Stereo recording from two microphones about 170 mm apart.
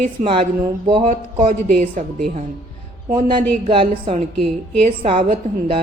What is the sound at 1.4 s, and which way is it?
Speech, 50° right (ahead or behind).